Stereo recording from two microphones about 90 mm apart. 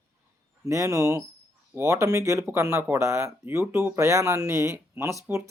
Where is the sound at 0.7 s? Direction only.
35° right (ahead or behind).